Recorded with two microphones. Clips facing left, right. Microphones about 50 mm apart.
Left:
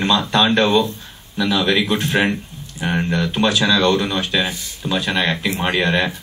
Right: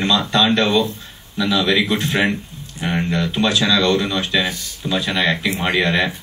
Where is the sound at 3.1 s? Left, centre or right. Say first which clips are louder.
Even; left.